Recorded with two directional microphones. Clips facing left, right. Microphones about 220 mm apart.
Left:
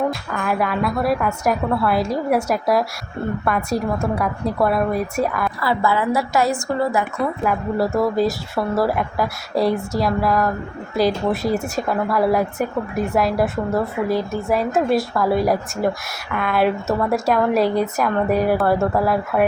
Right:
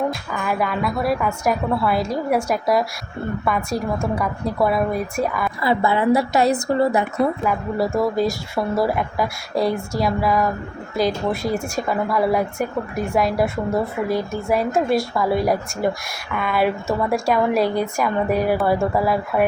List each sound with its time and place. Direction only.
0.1 s speech: centre (ahead or behind)
5.5 s a woman's voice: 20° right (ahead or behind)
7.4 s speech: centre (ahead or behind)